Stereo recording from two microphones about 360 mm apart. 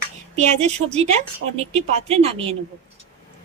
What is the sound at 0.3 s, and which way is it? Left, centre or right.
Speech, centre.